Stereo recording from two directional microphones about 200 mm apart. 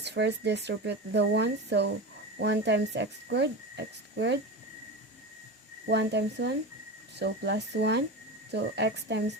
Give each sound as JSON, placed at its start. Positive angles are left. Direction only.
{"t": 0.0, "sound": "speech", "side_deg": -60}
{"t": 5.9, "sound": "speech", "side_deg": -60}